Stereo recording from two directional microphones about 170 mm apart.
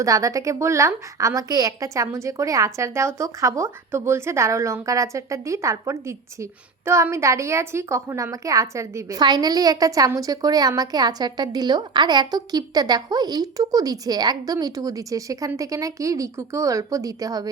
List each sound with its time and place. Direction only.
0.0 s a woman's voice: 20° right (ahead or behind)